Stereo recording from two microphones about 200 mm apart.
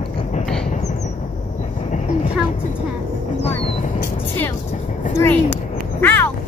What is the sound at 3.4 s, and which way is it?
Vehicle, 30° left (ahead or behind).